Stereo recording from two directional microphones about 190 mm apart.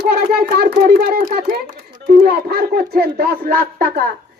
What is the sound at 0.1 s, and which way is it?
A child's voice, 55° right (ahead or behind).